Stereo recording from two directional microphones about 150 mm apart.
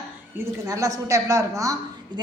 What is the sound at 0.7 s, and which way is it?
Speech, 25° right (ahead or behind).